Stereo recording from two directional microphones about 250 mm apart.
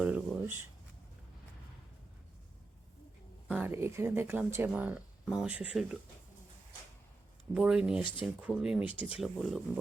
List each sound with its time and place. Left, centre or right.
0.0 s a sound: centre
3.5 s speech: centre
7.5 s speech: centre